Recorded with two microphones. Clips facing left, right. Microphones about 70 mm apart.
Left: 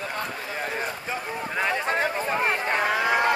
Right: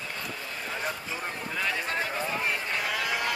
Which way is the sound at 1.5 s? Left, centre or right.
Left.